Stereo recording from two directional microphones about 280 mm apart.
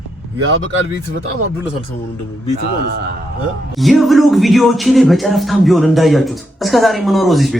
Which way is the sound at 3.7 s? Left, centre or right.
Centre.